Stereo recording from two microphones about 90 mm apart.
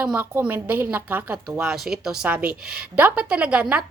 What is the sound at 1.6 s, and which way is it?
Speech, 5° right (ahead or behind).